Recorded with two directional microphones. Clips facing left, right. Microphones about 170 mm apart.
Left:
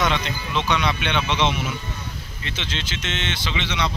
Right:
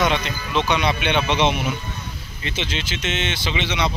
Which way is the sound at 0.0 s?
10° right (ahead or behind).